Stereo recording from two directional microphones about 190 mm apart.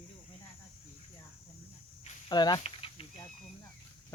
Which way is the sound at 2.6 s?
30° left (ahead or behind).